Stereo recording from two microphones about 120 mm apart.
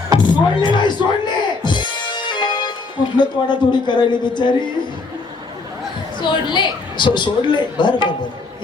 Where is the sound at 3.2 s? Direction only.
40° left (ahead or behind).